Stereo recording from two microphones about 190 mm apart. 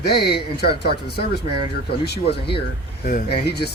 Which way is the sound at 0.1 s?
60° left (ahead or behind).